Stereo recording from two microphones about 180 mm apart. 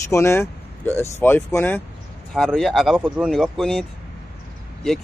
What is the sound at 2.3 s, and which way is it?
Speech, centre (ahead or behind).